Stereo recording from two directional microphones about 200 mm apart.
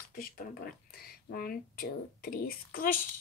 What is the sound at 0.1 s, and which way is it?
Speech, 50° left (ahead or behind).